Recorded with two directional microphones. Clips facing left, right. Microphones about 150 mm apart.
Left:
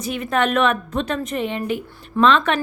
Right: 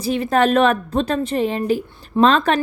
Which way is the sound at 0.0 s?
35° right (ahead or behind).